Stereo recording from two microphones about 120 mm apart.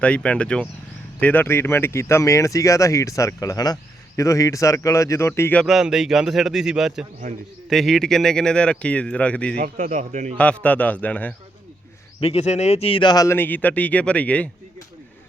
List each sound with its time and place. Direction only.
0.0 s speech: 10° left (ahead or behind)
5.6 s speech: 5° right (ahead or behind)
9.7 s a man's voice: 90° right
10.3 s speech: 10° left (ahead or behind)
12.2 s speech: 60° left (ahead or behind); by 13.2 s 40° left (ahead or behind)
13.2 s speech: 20° left (ahead or behind)